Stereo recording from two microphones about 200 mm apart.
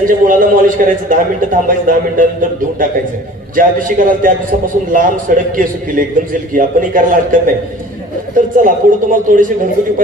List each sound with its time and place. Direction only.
0.0 s a man's voice: 45° right (ahead or behind)
3.5 s a man's voice: 45° right (ahead or behind)